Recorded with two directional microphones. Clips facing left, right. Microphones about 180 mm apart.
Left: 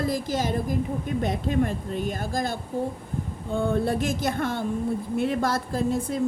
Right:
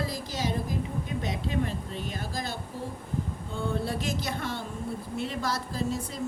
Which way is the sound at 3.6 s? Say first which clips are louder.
Left 7 dB; 50° left (ahead or behind).